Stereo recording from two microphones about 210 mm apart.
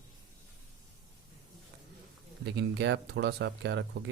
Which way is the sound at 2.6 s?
55° right (ahead or behind).